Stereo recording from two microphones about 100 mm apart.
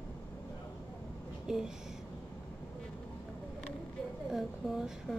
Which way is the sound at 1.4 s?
5° right (ahead or behind).